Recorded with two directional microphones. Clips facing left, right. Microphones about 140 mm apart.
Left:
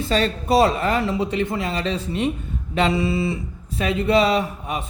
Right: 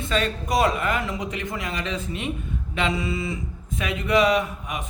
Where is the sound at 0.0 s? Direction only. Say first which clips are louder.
Left 4 dB; 30° left (ahead or behind).